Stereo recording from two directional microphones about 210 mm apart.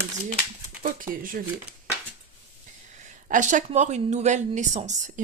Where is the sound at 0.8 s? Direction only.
40° right (ahead or behind).